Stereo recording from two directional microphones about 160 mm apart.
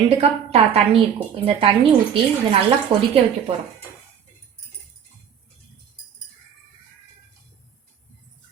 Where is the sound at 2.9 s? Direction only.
30° right (ahead or behind).